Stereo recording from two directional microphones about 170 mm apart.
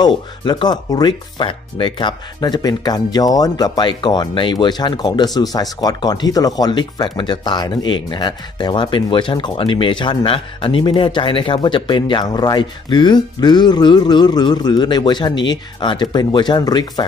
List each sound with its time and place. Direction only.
0.0 s speech: 25° left (ahead or behind)